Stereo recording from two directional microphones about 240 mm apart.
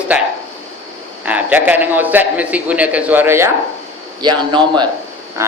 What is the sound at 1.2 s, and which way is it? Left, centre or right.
A man's voice, centre.